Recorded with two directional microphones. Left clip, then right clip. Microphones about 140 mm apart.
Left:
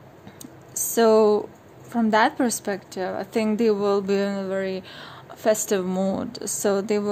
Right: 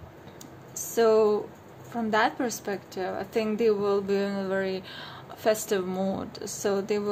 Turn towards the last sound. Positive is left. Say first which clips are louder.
# left 4 dB
turn(degrees=40)  # may be behind; listen again after turning